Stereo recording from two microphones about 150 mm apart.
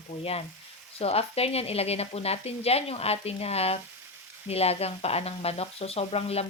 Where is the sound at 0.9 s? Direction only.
40° left (ahead or behind).